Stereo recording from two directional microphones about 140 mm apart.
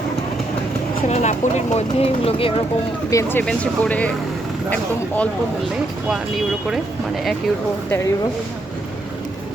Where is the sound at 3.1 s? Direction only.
15° left (ahead or behind).